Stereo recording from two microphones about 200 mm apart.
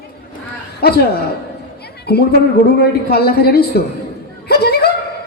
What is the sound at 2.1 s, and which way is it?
A woman's voice, 50° left (ahead or behind).